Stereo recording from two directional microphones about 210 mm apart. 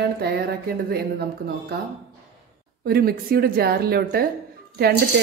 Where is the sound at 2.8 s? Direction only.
45° right (ahead or behind).